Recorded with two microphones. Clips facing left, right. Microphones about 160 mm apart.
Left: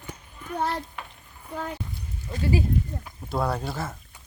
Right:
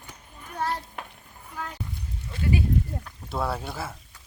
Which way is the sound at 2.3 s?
35° left (ahead or behind).